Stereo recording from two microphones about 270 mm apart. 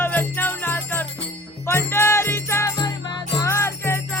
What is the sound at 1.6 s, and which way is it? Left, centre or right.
Music, centre.